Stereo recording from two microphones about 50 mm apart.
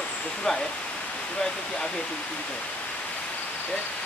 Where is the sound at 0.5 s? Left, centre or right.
Centre.